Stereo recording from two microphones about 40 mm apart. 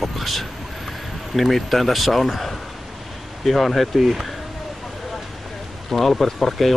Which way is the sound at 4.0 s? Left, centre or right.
Centre.